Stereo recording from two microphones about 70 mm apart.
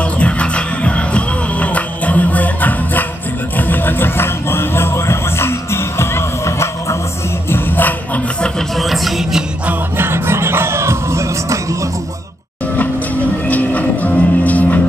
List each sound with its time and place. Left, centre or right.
0.0 s music: centre; by 7.0 s left
7.4 s music: left
8.4 s music: centre
9.7 s music: right
13.5 s music: left